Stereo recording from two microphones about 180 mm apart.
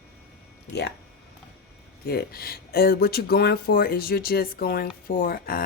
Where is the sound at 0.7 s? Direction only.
65° left (ahead or behind).